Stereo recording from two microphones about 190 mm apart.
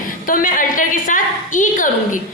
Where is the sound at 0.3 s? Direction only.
45° left (ahead or behind).